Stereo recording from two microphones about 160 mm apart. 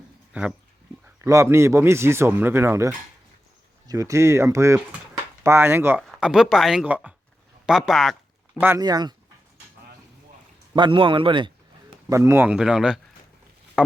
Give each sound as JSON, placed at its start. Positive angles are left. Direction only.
{"t": 1.0, "sound": "a man's voice", "side_deg": -15}
{"t": 5.1, "sound": "a sound", "side_deg": -15}
{"t": 6.0, "sound": "speech", "side_deg": 0}
{"t": 8.8, "sound": "speech", "side_deg": -25}
{"t": 10.8, "sound": "speech", "side_deg": -30}
{"t": 12.0, "sound": "speech", "side_deg": -20}
{"t": 13.8, "sound": "a sound", "side_deg": -5}